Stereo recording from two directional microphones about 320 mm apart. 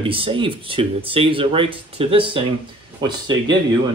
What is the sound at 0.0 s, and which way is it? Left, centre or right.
Speech, centre.